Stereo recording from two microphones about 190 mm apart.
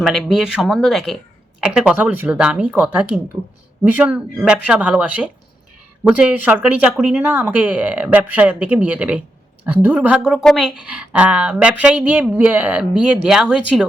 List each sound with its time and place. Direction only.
0.0 s speech: centre (ahead or behind)